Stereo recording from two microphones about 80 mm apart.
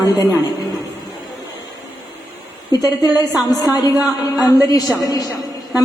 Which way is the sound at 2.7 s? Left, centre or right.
Left.